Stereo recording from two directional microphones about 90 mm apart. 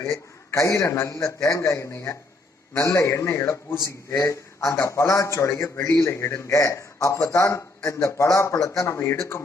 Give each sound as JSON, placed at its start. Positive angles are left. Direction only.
{"t": 0.0, "sound": "a man's voice", "side_deg": 35}